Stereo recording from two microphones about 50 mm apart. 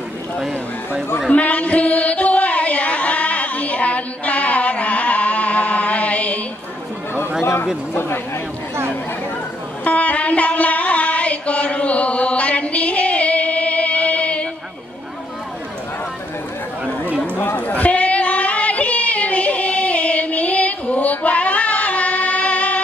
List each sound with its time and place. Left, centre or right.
1.3 s music: left
9.8 s music: left
17.6 s female singing: left